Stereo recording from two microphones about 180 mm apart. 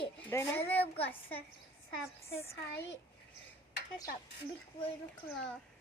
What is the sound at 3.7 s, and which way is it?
Speech, 55° left (ahead or behind).